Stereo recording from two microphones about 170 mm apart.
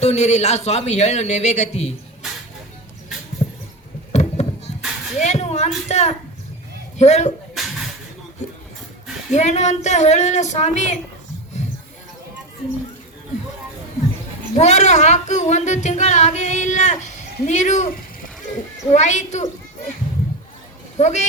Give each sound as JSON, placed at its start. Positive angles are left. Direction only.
{"t": 0.0, "sound": "a man's voice", "side_deg": 40}
{"t": 3.4, "sound": "a sound", "side_deg": 35}
{"t": 4.1, "sound": "chop", "side_deg": 40}
{"t": 5.1, "sound": "a woman's voice", "side_deg": 40}
{"t": 7.6, "sound": "a sound", "side_deg": 0}
{"t": 9.3, "sound": "speech", "side_deg": 40}
{"t": 14.5, "sound": "speech", "side_deg": 40}
{"t": 18.9, "sound": "speech", "side_deg": 45}
{"t": 21.0, "sound": "speech", "side_deg": 45}